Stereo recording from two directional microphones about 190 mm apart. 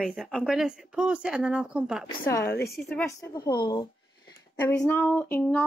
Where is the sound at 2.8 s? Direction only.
Centre (ahead or behind).